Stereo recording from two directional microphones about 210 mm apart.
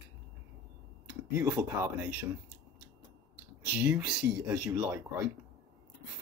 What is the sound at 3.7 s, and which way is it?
Speech, 10° right (ahead or behind).